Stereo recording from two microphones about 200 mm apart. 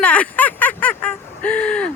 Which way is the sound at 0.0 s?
5° left (ahead or behind).